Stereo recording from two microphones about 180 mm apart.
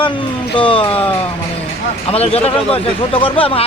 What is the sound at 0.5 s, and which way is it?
Speech, 30° left (ahead or behind).